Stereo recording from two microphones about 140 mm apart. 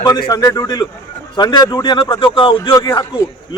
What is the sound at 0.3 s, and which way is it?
A man's voice, 25° left (ahead or behind).